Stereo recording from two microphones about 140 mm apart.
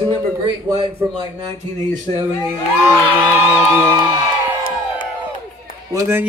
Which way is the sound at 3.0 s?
15° right (ahead or behind).